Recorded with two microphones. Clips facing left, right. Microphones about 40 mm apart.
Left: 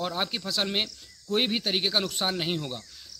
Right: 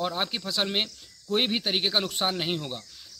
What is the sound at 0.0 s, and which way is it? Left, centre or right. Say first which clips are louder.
Speech: right 1 dB; centre.